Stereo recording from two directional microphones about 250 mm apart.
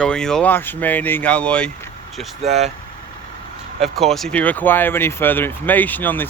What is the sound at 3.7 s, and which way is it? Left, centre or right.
Speech, centre.